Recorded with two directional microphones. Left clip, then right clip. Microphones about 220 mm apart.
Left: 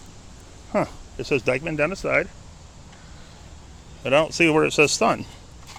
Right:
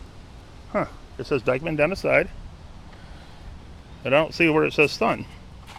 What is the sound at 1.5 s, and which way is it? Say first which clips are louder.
Speech: right 4 dB; centre (ahead or behind).